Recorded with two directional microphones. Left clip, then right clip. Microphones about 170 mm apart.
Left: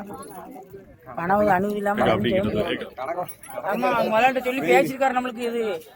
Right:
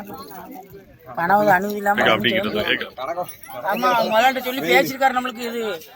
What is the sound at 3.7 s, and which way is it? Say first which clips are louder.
A man's voice: right 3 dB; 35° left (ahead or behind).